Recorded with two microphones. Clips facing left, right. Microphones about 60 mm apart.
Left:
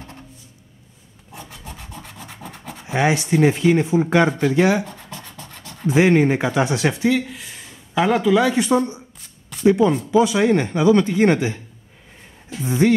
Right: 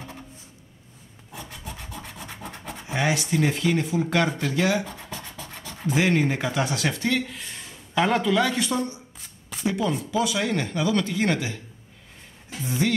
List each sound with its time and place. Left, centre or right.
1.5 s rub: centre
2.9 s speech: left
4.6 s speech: left
4.8 s a sound: centre
5.9 s speech: left
7.0 s speech: centre
8.5 s speech: left
12.6 s speech: left